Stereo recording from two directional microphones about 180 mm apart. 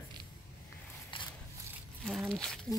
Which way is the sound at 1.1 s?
30° left (ahead or behind).